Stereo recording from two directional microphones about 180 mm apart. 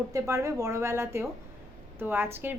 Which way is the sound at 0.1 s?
20° right (ahead or behind).